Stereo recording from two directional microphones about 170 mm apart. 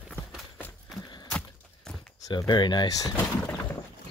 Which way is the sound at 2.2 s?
25° left (ahead or behind).